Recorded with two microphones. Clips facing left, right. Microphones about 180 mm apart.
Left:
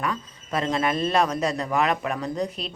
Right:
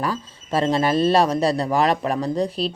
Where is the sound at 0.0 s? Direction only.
30° right (ahead or behind).